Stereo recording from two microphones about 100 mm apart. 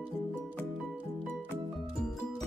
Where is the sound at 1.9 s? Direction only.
5° left (ahead or behind).